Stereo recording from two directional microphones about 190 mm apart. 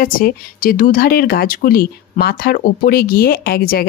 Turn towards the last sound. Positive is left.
turn(degrees=55)  # may be behind; listen again after turning